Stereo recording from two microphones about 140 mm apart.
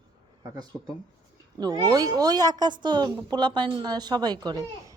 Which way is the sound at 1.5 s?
30° right (ahead or behind).